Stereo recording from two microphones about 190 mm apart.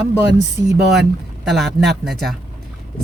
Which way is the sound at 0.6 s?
20° right (ahead or behind).